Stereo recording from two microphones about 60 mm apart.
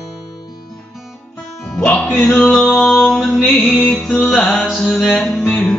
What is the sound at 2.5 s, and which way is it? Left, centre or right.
Music, centre.